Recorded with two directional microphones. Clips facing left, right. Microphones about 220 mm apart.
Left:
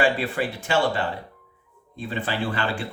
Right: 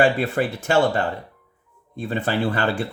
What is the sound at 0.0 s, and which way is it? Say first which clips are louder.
Speech: right 4 dB; 45° right (ahead or behind).